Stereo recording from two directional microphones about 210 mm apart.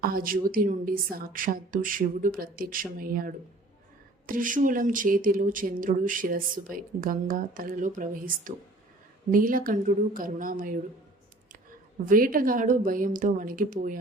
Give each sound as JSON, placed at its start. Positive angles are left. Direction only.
{"t": 0.0, "sound": "speech", "side_deg": -45}
{"t": 12.0, "sound": "speech", "side_deg": -40}